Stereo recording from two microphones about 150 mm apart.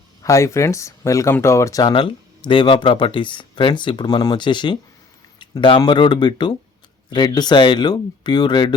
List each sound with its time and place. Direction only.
0.2 s speech: 20° left (ahead or behind)